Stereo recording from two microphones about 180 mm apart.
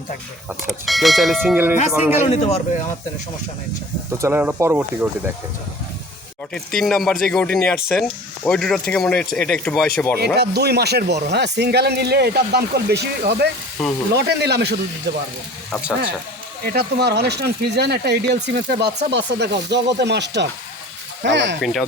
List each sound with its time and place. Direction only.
0.7 s speech: centre (ahead or behind)
2.3 s speech: 35° left (ahead or behind)
4.2 s speech: 10° right (ahead or behind)
6.5 s speech: 5° left (ahead or behind)
10.2 s speech: 65° right (ahead or behind)
13.8 s speech: centre (ahead or behind)
14.2 s speech: 65° right (ahead or behind)
16.6 s speech: 65° right (ahead or behind)
21.6 s speech: centre (ahead or behind)